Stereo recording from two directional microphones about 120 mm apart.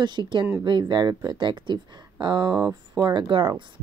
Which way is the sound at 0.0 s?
40° right (ahead or behind).